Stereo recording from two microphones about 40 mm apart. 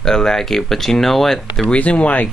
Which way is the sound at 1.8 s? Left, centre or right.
Left.